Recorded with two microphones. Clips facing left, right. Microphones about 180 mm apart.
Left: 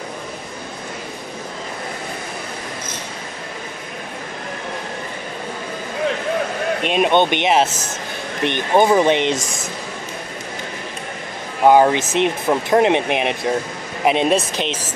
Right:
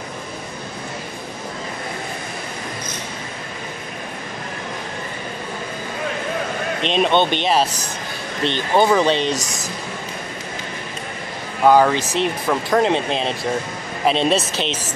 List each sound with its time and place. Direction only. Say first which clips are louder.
6.8 s speech: left 1 dB; 10° left (ahead or behind)
11.6 s speech: left 1 dB; 20° left (ahead or behind)